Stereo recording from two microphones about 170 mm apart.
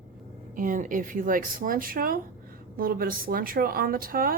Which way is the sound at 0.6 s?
50° right (ahead or behind).